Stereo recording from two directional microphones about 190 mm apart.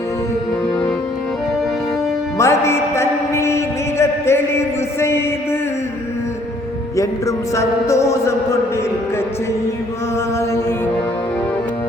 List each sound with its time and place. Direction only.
2.4 s music: 15° left (ahead or behind)
6.9 s music: 15° left (ahead or behind)